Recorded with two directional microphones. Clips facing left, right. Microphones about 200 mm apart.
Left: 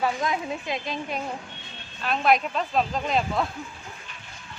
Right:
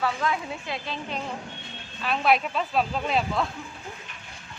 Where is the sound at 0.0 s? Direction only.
15° left (ahead or behind).